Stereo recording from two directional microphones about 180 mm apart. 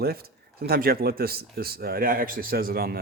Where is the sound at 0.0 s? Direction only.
60° right (ahead or behind).